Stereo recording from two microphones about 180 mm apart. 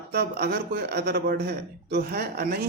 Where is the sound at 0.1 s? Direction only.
65° right (ahead or behind).